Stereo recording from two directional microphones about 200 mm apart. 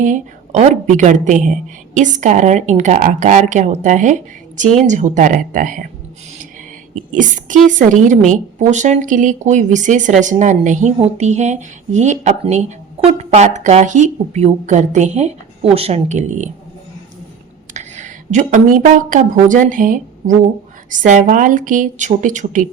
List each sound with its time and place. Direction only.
0.0 s speech: 35° right (ahead or behind)
7.1 s speech: 40° right (ahead or behind)
17.7 s a woman's voice: 35° right (ahead or behind)